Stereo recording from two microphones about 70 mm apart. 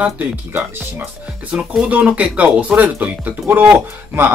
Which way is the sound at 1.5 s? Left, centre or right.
Centre.